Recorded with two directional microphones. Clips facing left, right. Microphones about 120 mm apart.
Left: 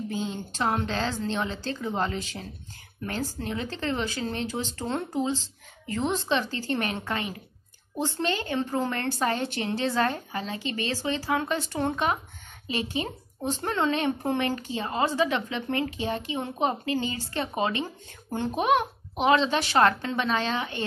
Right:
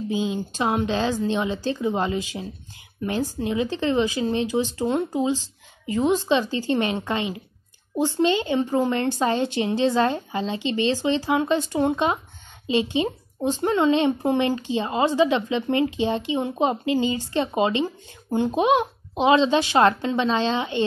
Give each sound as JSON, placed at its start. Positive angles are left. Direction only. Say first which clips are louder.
{"t": 0.1, "sound": "speech", "louder": "right 6 dB", "side_deg": -15}